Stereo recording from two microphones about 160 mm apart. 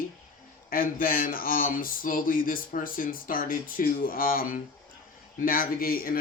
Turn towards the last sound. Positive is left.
turn(degrees=65)  # may be behind; listen again after turning